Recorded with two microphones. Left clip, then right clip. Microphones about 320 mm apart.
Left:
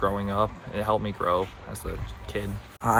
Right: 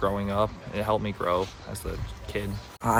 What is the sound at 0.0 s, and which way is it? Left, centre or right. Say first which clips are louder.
Speech: left 1 dB; centre.